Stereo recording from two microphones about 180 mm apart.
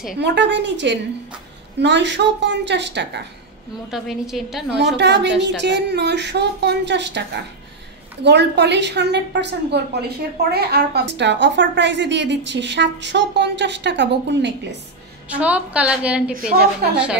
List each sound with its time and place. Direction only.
0.2 s a woman's voice: 75° right (ahead or behind)
3.9 s a woman's voice: centre (ahead or behind)
4.7 s a woman's voice: 70° right (ahead or behind)
15.2 s a woman's voice: 10° right (ahead or behind)